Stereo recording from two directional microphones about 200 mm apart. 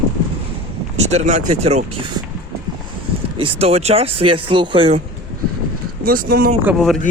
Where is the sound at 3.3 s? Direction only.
30° right (ahead or behind).